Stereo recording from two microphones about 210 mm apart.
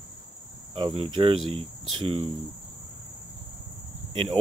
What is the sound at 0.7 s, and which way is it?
Speech, 25° right (ahead or behind).